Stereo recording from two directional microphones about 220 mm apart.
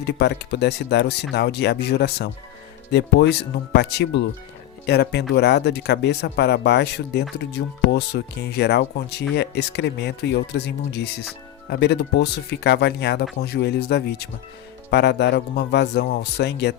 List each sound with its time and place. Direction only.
0.0 s speech: 50° left (ahead or behind)